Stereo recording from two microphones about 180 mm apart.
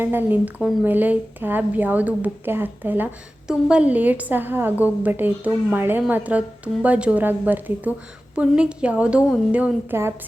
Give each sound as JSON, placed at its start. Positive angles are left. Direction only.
{"t": 0.0, "sound": "speech", "side_deg": -10}